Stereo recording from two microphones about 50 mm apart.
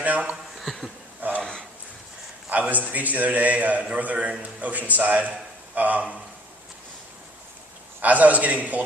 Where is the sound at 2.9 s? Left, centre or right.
Right.